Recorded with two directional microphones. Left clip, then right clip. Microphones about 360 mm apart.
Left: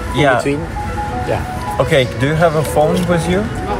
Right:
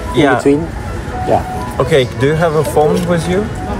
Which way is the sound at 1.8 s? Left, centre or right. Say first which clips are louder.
Right 2 dB; centre.